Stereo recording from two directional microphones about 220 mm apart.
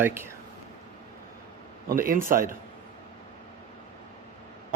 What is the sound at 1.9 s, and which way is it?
Speech, 40° right (ahead or behind).